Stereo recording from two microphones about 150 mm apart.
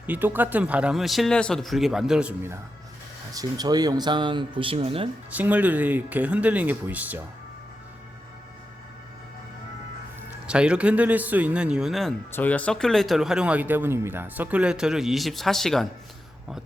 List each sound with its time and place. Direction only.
0.1 s speech: 10° right (ahead or behind)
3.3 s speech: 25° right (ahead or behind)
5.3 s speech: 10° right (ahead or behind)
10.4 s speech: 5° right (ahead or behind)
12.3 s speech: 10° left (ahead or behind)